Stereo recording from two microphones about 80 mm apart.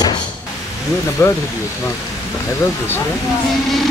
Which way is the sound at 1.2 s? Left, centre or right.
Left.